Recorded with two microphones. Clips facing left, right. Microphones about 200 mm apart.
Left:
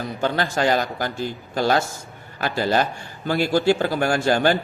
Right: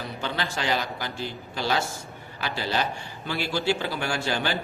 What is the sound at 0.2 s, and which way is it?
A man's voice, 45° left (ahead or behind).